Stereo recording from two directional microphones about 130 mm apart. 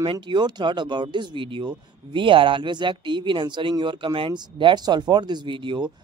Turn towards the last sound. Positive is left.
turn(degrees=-40)  # may be behind; listen again after turning